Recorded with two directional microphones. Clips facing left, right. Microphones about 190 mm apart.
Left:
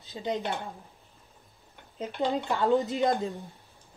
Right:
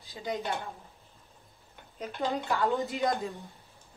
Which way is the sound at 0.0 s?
20° left (ahead or behind).